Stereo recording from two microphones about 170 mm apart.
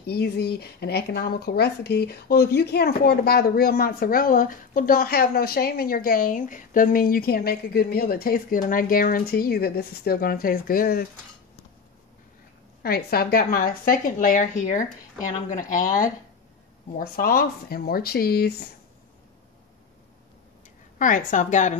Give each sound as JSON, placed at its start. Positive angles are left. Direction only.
{"t": 0.0, "sound": "speech", "side_deg": 70}
{"t": 12.8, "sound": "a woman's voice", "side_deg": 65}
{"t": 16.9, "sound": "speech", "side_deg": 60}
{"t": 21.0, "sound": "a woman's voice", "side_deg": 50}